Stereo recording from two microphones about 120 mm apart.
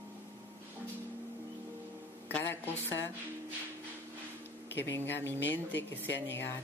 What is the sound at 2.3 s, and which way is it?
Speech, 15° left (ahead or behind).